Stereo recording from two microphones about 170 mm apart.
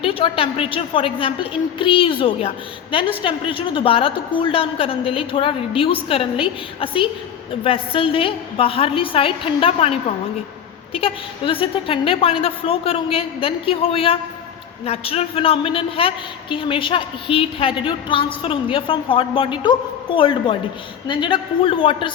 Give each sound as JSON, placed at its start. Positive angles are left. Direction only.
{"t": 0.0, "sound": "a woman's voice", "side_deg": 35}